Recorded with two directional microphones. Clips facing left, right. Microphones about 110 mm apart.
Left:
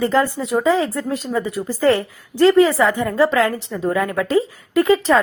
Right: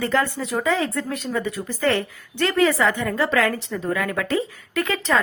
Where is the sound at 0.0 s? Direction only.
25° left (ahead or behind).